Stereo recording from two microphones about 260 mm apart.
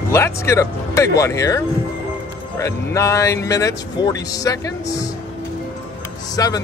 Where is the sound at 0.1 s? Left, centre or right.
Centre.